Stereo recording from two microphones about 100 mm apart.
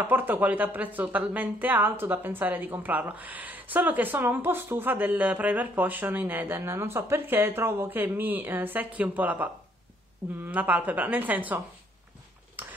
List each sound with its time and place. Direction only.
0.0 s speech: 20° right (ahead or behind)
12.6 s hammer: 20° right (ahead or behind)